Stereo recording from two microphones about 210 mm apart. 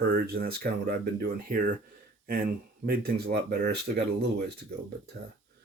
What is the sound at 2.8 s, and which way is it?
Speech, 45° right (ahead or behind).